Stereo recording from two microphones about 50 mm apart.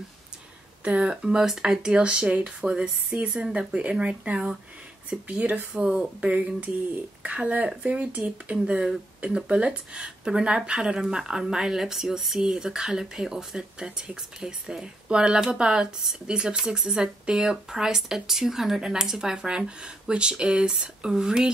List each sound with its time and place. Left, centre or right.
0.8 s speech: right
1.1 s speech: centre